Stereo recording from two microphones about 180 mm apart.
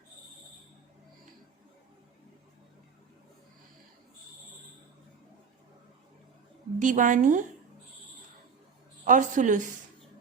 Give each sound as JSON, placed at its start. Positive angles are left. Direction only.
{"t": 6.7, "sound": "a woman's voice", "side_deg": -45}
{"t": 9.0, "sound": "a woman's voice", "side_deg": -45}